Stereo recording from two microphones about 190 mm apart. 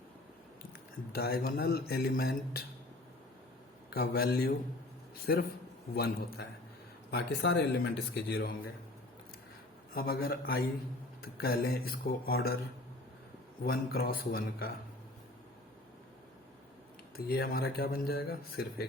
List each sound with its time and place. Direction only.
1.1 s speech: 55° left (ahead or behind)
3.8 s speech: 55° left (ahead or behind)
9.9 s speech: 50° left (ahead or behind)
13.7 s speech: 55° left (ahead or behind)
17.2 s speech: 55° left (ahead or behind)